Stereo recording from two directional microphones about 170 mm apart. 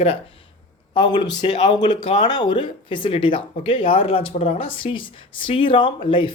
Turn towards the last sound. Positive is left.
turn(degrees=30)  # may be behind; listen again after turning